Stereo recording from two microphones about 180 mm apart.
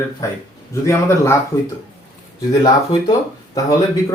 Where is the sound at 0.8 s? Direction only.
15° left (ahead or behind).